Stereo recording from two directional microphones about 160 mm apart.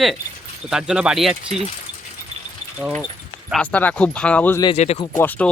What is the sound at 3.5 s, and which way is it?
Speech, 5° left (ahead or behind).